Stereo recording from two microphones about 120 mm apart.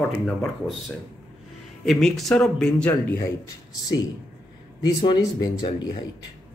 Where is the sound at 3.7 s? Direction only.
30° left (ahead or behind).